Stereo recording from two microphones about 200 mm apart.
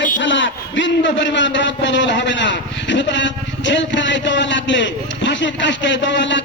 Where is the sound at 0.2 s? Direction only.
70° left (ahead or behind).